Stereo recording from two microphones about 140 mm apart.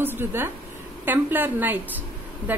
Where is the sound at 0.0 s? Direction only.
15° right (ahead or behind).